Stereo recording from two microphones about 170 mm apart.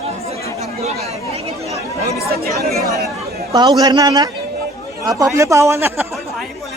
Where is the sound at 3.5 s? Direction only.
25° right (ahead or behind).